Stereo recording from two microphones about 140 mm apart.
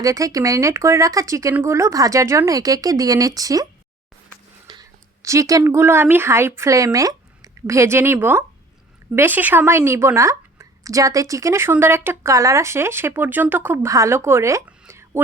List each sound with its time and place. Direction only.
0.0 s a woman's voice: 25° right (ahead or behind)
4.7 s a woman's voice: 25° right (ahead or behind)